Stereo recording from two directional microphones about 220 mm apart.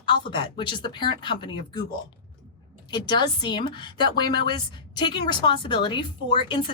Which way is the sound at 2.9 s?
20° left (ahead or behind).